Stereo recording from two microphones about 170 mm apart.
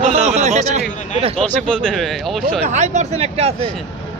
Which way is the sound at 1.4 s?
5° left (ahead or behind).